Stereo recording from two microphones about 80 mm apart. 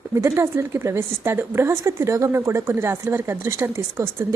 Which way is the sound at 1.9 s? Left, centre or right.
Right.